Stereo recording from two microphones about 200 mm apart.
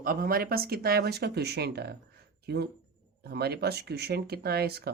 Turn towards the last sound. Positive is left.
turn(degrees=-55)  # may be behind; listen again after turning